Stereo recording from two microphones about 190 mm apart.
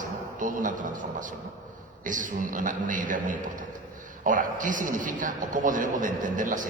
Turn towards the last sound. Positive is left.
turn(degrees=-45)  # may be behind; listen again after turning